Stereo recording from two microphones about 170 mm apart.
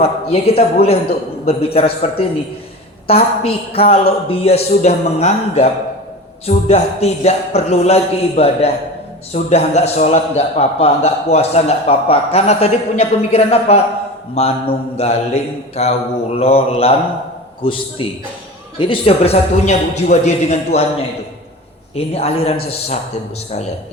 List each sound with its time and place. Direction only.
0.0 s a man's voice: 35° left (ahead or behind)
21.9 s a man's voice: 35° left (ahead or behind)